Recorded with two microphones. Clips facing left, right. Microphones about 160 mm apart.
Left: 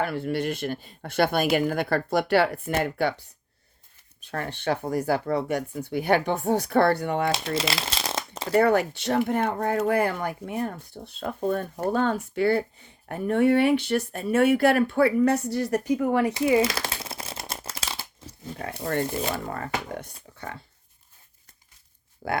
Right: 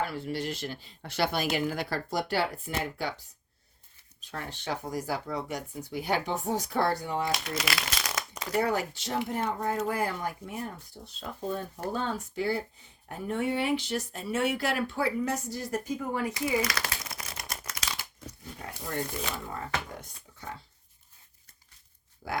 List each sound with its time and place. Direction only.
0.0 s speech: 60° left (ahead or behind)
4.2 s speech: 60° left (ahead or behind)
7.3 s speech: 25° left (ahead or behind)
8.5 s speech: 65° left (ahead or behind)
16.6 s shuffling cards: 25° left (ahead or behind)
18.8 s speech: 65° left (ahead or behind)
22.2 s speech: 60° left (ahead or behind)